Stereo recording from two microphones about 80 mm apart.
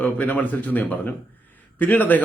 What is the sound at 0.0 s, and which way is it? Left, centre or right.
A man's voice, centre.